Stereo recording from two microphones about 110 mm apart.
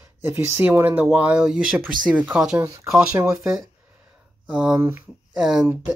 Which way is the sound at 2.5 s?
25° right (ahead or behind).